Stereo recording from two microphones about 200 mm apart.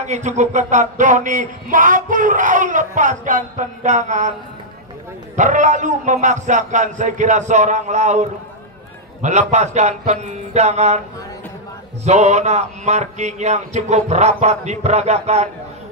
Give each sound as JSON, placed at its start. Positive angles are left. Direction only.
{"t": 0.0, "sound": "speech", "side_deg": -35}
{"t": 5.3, "sound": "speech", "side_deg": -40}
{"t": 12.0, "sound": "speech", "side_deg": -35}